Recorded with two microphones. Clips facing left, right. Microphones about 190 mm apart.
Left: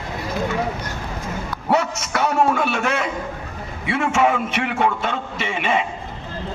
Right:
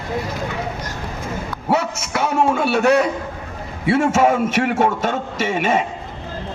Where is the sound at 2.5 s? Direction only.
35° right (ahead or behind).